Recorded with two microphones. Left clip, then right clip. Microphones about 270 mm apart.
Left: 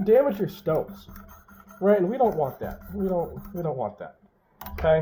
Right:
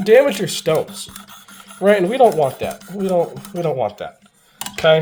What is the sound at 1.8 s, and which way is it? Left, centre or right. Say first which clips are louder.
Speech: right 8 dB; right.